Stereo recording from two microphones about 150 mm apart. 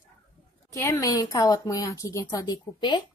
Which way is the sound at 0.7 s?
20° left (ahead or behind).